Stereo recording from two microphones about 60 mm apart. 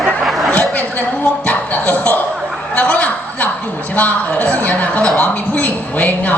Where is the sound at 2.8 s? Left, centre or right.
Left.